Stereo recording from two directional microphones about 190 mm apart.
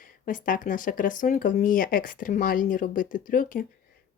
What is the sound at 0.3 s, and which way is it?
Speech, 45° left (ahead or behind).